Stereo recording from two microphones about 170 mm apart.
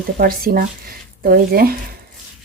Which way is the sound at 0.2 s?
60° right (ahead or behind).